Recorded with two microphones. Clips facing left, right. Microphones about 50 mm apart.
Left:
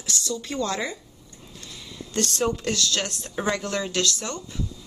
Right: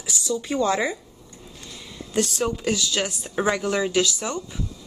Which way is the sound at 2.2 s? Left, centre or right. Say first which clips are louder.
Right 1 dB; centre.